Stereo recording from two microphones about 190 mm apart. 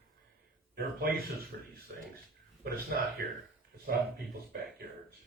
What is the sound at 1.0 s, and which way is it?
Speech, 50° right (ahead or behind).